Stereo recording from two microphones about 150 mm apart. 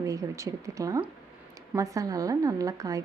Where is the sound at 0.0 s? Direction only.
20° right (ahead or behind).